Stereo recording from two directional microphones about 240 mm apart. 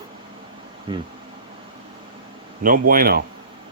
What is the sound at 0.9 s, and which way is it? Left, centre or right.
Speech, centre.